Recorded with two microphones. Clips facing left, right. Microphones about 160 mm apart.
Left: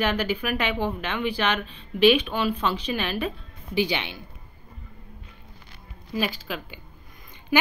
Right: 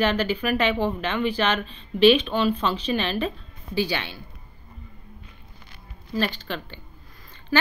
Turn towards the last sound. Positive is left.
turn(degrees=5)  # may be behind; listen again after turning